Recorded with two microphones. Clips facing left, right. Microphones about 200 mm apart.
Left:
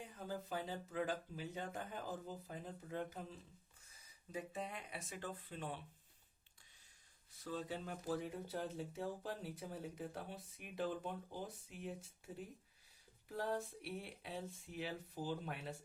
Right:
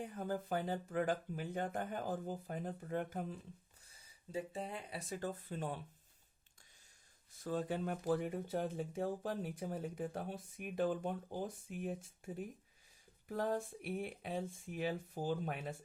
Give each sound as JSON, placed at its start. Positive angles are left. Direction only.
{"t": 0.0, "sound": "speech", "side_deg": -55}
{"t": 3.8, "sound": "speech", "side_deg": -30}
{"t": 7.4, "sound": "speech", "side_deg": -50}